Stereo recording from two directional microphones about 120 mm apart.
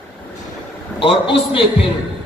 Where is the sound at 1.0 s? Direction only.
45° left (ahead or behind).